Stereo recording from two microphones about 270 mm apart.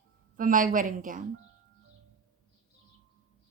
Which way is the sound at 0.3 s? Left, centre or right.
Right.